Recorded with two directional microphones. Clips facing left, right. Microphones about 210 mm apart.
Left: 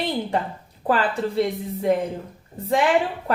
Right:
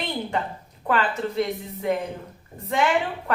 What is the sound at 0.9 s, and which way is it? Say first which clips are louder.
Speech: left 2 dB; 30° left (ahead or behind).